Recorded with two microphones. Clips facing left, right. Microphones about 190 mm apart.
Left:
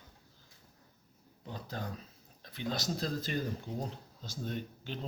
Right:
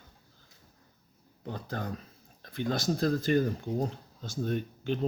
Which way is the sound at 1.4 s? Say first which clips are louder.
Right 5 dB; 55° right (ahead or behind).